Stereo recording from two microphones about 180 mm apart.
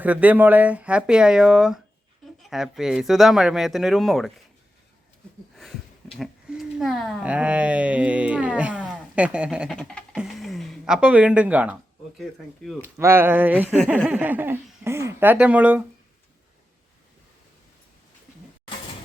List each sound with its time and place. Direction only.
0.0 s speech: 10° right (ahead or behind)
5.5 s speech: centre (ahead or behind)
9.7 s music: 5° left (ahead or behind)
10.2 s speech: centre (ahead or behind)
12.8 s speech: 15° right (ahead or behind)